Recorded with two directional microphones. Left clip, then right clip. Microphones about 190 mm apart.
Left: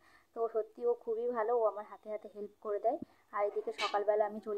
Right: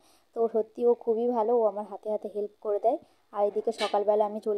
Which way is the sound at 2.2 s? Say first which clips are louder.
Right 13 dB; 35° right (ahead or behind).